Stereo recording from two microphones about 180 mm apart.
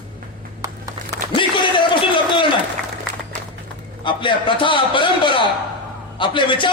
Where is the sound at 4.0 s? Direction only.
30° left (ahead or behind).